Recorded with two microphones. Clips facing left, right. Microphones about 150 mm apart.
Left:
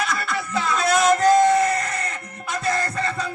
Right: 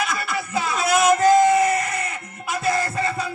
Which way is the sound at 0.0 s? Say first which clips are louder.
Even; centre (ahead or behind).